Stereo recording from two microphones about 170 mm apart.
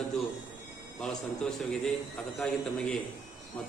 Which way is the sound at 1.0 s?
5° left (ahead or behind).